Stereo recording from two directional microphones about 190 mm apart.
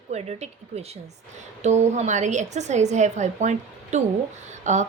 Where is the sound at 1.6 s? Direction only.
35° right (ahead or behind).